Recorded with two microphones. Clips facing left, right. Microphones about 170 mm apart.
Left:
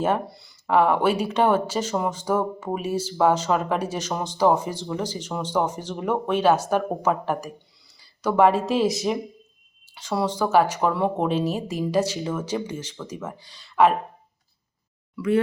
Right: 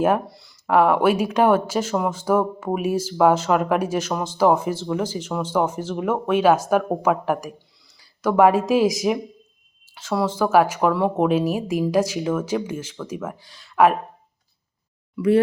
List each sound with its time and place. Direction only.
0.0 s speech: 5° right (ahead or behind)
15.1 s speech: 30° right (ahead or behind)